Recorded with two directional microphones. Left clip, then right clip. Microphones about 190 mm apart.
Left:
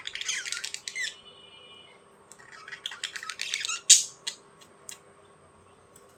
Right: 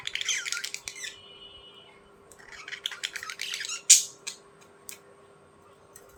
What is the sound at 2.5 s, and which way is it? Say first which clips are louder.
Toothbrush: right 3 dB; 5° left (ahead or behind).